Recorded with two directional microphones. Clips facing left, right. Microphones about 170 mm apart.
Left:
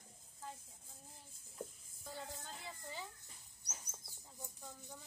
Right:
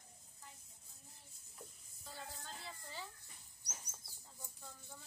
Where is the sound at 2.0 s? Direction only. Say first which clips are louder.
Left 3 dB; 15° left (ahead or behind).